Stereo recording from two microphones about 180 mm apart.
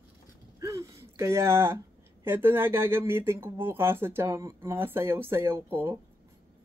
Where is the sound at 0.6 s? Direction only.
15° right (ahead or behind).